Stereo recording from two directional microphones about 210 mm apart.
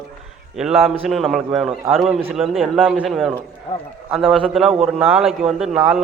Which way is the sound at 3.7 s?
20° left (ahead or behind).